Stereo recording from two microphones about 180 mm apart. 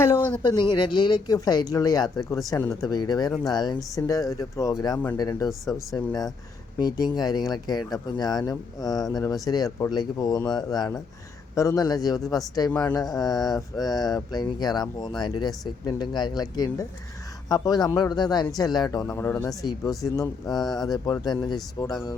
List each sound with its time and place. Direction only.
0.0 s speech: 10° left (ahead or behind)
0.7 s speech: 25° left (ahead or behind)